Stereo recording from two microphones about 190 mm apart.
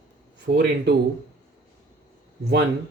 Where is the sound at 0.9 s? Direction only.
60° right (ahead or behind).